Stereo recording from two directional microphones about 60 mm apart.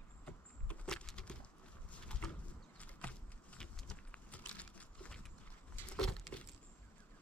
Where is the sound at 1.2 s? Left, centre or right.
Centre.